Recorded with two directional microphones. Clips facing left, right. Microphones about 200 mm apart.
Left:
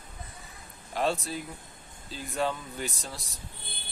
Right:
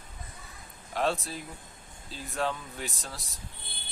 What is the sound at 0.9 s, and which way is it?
Speech, centre (ahead or behind).